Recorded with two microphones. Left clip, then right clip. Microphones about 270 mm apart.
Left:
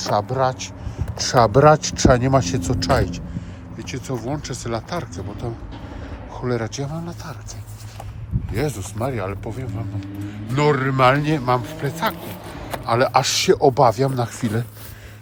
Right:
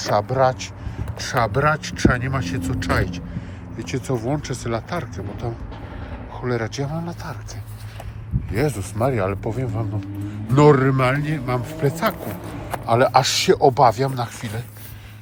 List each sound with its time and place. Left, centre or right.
0.0 s speech: centre
1.2 s speech: left
3.8 s speech: centre
8.5 s a man's voice: centre; by 14.6 s left